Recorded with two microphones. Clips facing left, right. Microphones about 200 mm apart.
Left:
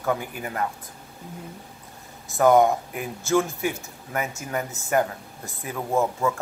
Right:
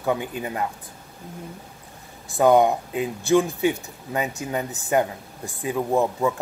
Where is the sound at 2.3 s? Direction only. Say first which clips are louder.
Right 1 dB; 15° right (ahead or behind).